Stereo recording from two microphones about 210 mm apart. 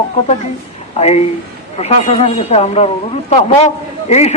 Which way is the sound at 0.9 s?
30° left (ahead or behind).